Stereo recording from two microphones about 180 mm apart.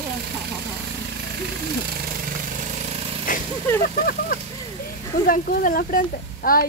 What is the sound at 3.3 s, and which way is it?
Speech, 50° left (ahead or behind).